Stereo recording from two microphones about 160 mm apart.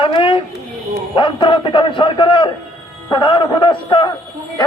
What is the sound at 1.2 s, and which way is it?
A man's voice, 30° left (ahead or behind).